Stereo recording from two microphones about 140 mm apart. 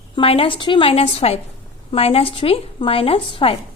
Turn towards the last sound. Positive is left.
turn(degrees=45)  # may be behind; listen again after turning